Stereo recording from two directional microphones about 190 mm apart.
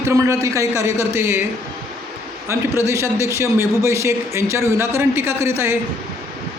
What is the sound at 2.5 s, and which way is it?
A man's voice, 15° right (ahead or behind).